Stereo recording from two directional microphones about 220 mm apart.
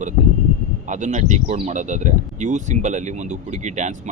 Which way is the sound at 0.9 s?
35° right (ahead or behind).